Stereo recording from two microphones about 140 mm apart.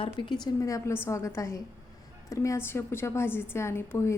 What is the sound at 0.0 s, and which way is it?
A woman's voice, 35° left (ahead or behind).